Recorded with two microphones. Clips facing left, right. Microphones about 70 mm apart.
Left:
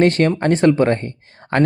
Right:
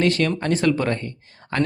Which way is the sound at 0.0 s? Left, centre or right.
Left.